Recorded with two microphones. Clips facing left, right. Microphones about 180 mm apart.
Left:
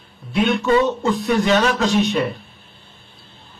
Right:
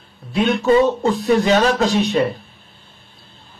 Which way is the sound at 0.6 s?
35° right (ahead or behind).